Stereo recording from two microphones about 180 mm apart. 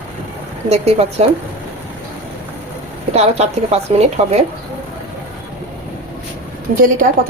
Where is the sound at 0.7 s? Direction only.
35° right (ahead or behind).